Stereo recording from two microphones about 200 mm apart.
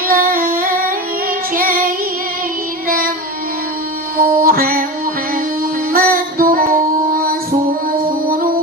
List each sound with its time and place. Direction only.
0.1 s female singing: 45° right (ahead or behind)
1.5 s child singing: 45° right (ahead or behind)
4.2 s music: 45° right (ahead or behind)
5.9 s music: 45° right (ahead or behind)